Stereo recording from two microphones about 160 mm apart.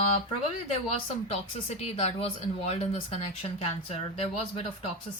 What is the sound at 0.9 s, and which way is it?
Speech, 40° left (ahead or behind).